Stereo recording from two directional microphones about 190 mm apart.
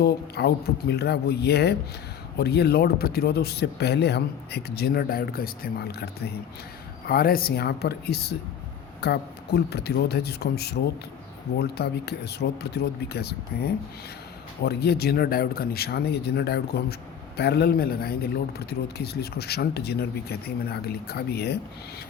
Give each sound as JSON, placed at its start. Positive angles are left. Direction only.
{"t": 0.0, "sound": "speech", "side_deg": 60}